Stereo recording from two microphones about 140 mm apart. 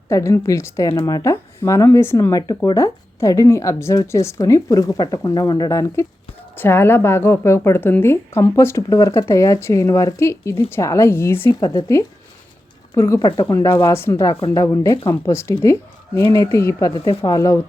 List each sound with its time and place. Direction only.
0.1 s a woman's voice: 20° left (ahead or behind)
11.6 s a woman's voice: 25° left (ahead or behind)